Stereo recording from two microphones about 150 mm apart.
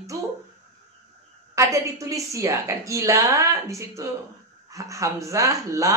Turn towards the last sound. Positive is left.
turn(degrees=-20)  # may be behind; listen again after turning